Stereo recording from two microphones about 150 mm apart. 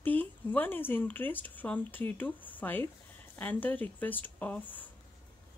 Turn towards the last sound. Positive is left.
turn(degrees=10)  # may be behind; listen again after turning